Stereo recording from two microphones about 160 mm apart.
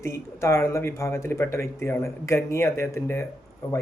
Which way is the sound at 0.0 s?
15° left (ahead or behind).